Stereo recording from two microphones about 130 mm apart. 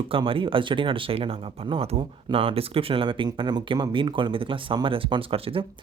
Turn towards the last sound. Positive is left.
turn(degrees=-45)  # may be behind; listen again after turning